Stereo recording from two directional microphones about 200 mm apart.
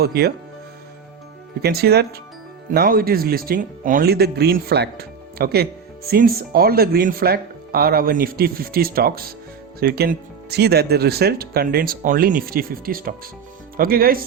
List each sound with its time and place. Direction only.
0.0 s speech: 50° right (ahead or behind)
1.6 s speech: 55° right (ahead or behind)